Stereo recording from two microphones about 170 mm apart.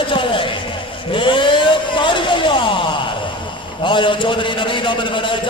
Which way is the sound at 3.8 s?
30° left (ahead or behind).